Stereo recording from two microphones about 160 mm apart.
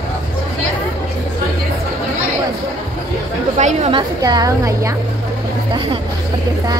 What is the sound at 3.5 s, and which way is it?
Speech, 45° right (ahead or behind).